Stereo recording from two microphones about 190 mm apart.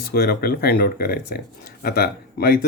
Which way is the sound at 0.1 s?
50° left (ahead or behind).